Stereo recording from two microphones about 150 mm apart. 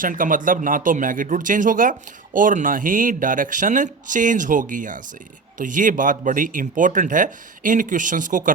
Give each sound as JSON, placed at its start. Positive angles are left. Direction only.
{"t": 0.0, "sound": "speech", "side_deg": -65}